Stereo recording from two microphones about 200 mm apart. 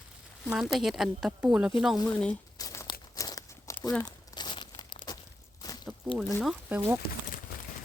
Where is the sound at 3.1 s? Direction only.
20° left (ahead or behind).